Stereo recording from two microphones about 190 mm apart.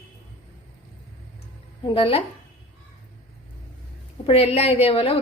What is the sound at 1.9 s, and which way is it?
Speech, 30° left (ahead or behind).